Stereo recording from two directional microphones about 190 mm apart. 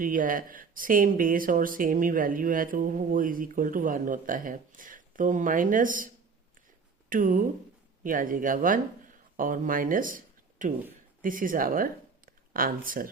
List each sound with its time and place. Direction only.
0.0 s speech: 45° right (ahead or behind)
7.1 s speech: 45° right (ahead or behind)